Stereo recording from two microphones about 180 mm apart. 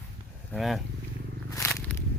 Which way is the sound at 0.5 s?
Centre (ahead or behind).